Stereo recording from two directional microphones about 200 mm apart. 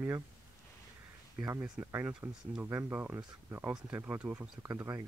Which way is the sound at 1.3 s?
10° right (ahead or behind).